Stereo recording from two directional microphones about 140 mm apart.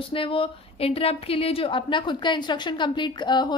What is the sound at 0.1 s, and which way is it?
A woman's voice, 40° left (ahead or behind).